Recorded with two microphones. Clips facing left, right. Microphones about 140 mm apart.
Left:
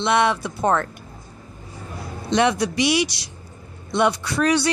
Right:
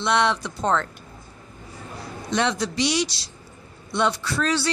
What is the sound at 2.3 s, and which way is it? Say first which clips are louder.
Speech: left 4 dB; 10° left (ahead or behind).